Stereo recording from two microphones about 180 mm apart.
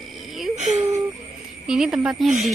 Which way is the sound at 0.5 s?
40° right (ahead or behind).